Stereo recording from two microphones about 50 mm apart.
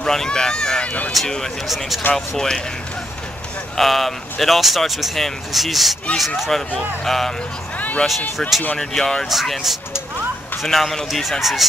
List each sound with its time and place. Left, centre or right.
0.0 s a sound: centre
0.8 s speech: left
2.1 s speech: centre
3.7 s speech: centre
7.7 s a sound: left
8.4 s speech: centre
8.7 s speech: centre
9.3 s speech: centre